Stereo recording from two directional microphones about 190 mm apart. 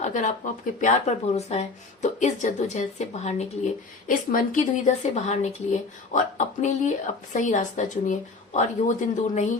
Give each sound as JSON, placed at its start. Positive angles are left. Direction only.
{"t": 0.0, "sound": "speech", "side_deg": 40}